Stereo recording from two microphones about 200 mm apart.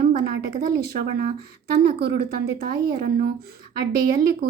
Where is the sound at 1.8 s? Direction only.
50° right (ahead or behind).